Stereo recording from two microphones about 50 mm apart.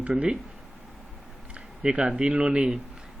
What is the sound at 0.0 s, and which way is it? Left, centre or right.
Speech, right.